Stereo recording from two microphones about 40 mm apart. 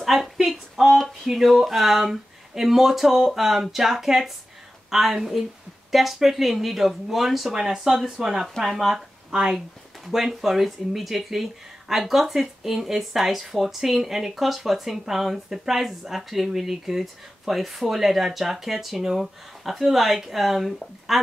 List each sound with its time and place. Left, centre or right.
0.0 s a woman's voice: centre
9.3 s speech: centre